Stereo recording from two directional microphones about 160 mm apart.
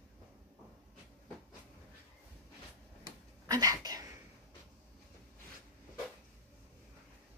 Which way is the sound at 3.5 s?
20° right (ahead or behind).